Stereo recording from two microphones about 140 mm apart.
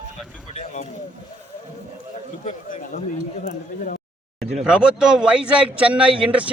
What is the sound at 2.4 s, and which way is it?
Speech, 55° left (ahead or behind).